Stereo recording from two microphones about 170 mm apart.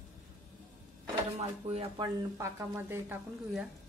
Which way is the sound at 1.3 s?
35° right (ahead or behind).